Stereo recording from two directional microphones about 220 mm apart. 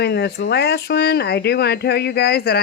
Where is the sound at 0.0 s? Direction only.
50° left (ahead or behind).